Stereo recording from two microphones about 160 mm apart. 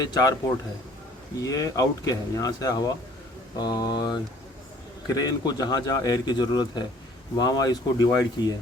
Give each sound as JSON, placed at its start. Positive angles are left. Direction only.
{"t": 0.0, "sound": "speech", "side_deg": 25}
{"t": 1.4, "sound": "speech", "side_deg": 20}